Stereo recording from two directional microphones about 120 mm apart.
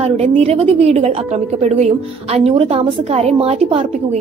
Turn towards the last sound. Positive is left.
turn(degrees=-60)  # may be behind; listen again after turning